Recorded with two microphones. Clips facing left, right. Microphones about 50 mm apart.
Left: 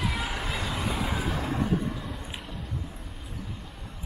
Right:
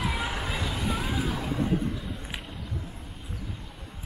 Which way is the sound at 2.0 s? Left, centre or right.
Centre.